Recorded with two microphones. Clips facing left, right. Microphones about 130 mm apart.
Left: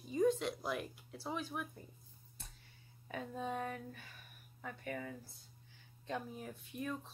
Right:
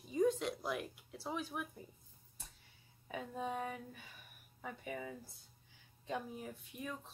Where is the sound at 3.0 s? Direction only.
5° right (ahead or behind).